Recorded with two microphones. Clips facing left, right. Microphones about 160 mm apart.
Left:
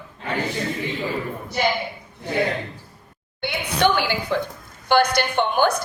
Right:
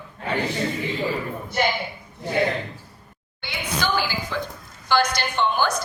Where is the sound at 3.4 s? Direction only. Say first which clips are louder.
Left 6 dB; 65° left (ahead or behind).